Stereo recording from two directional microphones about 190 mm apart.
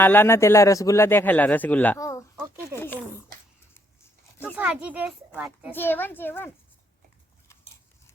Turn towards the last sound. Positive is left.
turn(degrees=10)  # may be behind; listen again after turning